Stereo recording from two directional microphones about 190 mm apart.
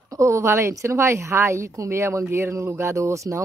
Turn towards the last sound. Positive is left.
turn(degrees=-15)  # may be behind; listen again after turning